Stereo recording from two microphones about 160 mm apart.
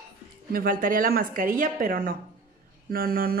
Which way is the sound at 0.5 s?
60° right (ahead or behind).